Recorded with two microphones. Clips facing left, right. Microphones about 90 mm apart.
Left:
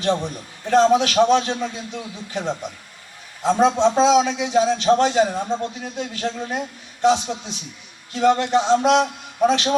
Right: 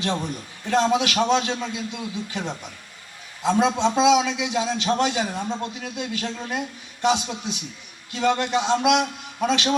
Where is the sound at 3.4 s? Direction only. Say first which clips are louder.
Left 4 dB; 20° left (ahead or behind).